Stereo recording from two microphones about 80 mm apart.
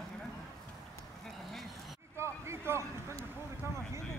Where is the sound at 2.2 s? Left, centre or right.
Right.